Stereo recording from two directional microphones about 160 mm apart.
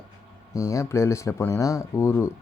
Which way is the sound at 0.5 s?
20° left (ahead or behind).